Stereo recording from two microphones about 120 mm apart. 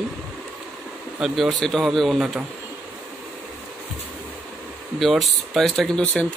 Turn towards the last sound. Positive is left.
turn(degrees=10)  # may be behind; listen again after turning